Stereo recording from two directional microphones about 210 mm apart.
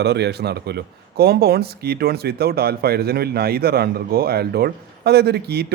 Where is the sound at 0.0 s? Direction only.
50° right (ahead or behind).